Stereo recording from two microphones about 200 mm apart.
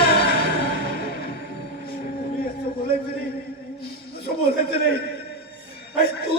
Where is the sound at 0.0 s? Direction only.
50° left (ahead or behind).